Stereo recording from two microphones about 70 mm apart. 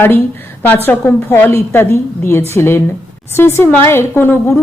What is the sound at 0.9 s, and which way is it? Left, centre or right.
A woman's voice, left.